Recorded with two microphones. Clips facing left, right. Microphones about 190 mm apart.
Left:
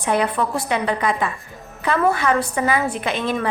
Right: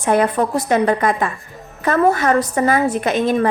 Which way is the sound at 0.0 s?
45° right (ahead or behind).